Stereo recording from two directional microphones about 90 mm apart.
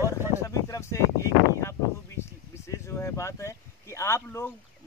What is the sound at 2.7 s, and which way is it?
Speech, 30° left (ahead or behind).